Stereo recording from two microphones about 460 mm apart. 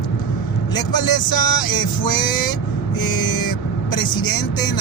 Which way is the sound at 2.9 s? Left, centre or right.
Left.